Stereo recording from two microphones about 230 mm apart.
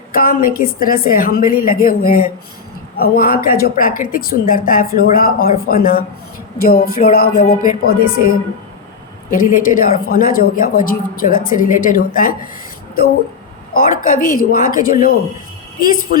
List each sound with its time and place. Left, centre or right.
0.1 s speech: left
9.3 s speech: left
13.7 s speech: left